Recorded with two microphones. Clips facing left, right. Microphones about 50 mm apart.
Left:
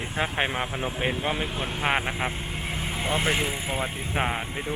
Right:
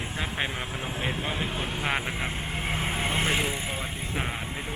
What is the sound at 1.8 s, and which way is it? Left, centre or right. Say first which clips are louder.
Speech: left 5 dB; left.